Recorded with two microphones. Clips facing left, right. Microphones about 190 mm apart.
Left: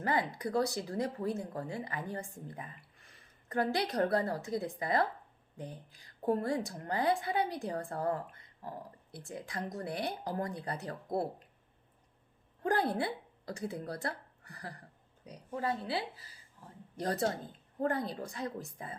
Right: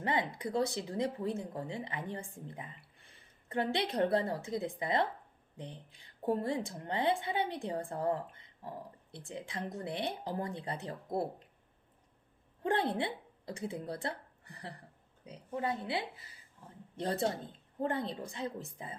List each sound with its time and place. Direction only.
0.0 s a woman's voice: 25° right (ahead or behind)
2.5 s a sound: 25° right (ahead or behind)
3.5 s a woman's voice: 25° right (ahead or behind)
12.6 s a woman's voice: 25° right (ahead or behind)